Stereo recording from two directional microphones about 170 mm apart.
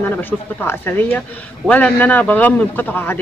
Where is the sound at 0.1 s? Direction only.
10° left (ahead or behind).